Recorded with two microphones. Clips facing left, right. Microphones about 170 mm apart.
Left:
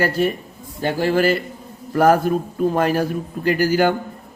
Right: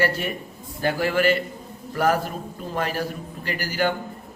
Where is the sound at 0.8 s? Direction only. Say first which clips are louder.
Left 4 dB; 30° left (ahead or behind).